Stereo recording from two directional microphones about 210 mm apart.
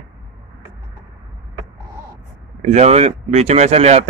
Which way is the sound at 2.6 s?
30° right (ahead or behind).